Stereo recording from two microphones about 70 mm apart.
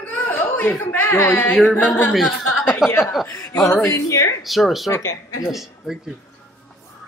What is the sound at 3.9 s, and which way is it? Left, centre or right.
Speech, left.